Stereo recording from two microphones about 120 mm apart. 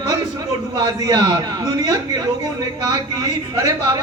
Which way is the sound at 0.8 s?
35° right (ahead or behind).